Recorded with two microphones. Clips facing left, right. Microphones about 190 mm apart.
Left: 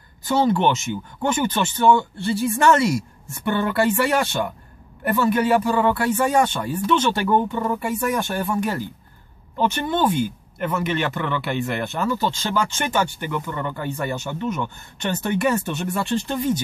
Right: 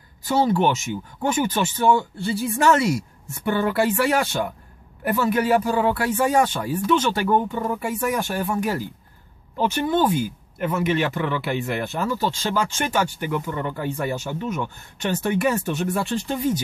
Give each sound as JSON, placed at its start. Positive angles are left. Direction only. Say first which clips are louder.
{"t": 0.2, "sound": "speech", "louder": "left 1 dB", "side_deg": -5}